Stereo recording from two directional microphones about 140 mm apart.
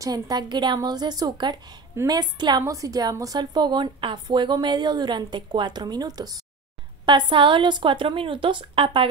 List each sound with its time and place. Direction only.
0.0 s a woman's voice: 30° right (ahead or behind)